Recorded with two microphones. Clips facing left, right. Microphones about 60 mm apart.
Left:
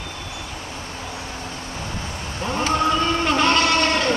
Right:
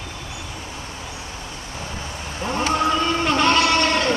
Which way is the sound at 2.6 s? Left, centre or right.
Centre.